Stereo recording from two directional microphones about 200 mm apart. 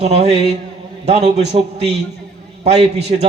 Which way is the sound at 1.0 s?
35° right (ahead or behind).